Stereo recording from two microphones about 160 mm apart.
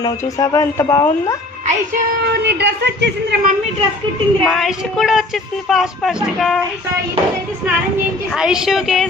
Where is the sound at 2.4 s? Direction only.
90° right.